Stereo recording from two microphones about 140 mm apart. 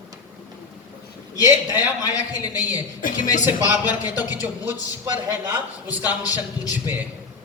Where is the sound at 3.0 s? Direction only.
75° left (ahead or behind).